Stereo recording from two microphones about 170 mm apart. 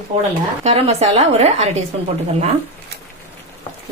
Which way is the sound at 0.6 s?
35° right (ahead or behind).